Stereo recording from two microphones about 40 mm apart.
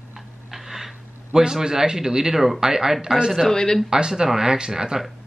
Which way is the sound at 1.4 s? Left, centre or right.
Centre.